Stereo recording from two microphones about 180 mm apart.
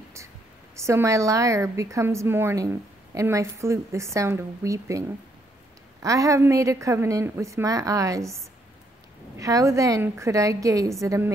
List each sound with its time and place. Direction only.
0.7 s a woman's voice: 15° right (ahead or behind)
6.0 s a woman's voice: 15° right (ahead or behind)
9.4 s a woman's voice: 20° right (ahead or behind)